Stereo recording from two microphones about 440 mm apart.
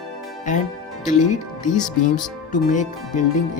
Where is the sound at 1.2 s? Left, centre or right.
Centre.